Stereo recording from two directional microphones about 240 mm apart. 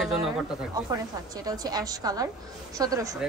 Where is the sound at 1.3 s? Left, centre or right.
Centre.